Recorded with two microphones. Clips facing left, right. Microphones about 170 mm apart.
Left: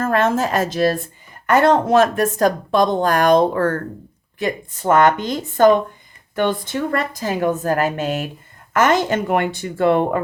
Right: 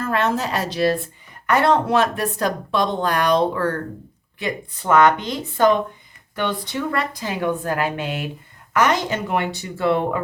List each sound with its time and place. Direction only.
0.0 s speech: 50° left (ahead or behind)